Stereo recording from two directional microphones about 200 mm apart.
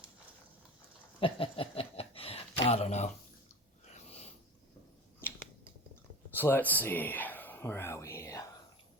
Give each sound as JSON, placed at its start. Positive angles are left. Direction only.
{"t": 1.2, "sound": "a sound", "side_deg": 25}
{"t": 3.9, "sound": "snort", "side_deg": 30}
{"t": 6.3, "sound": "speech", "side_deg": 10}